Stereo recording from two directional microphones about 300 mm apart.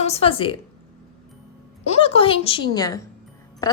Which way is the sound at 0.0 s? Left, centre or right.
Centre.